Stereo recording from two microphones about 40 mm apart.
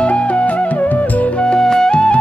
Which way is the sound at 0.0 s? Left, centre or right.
Left.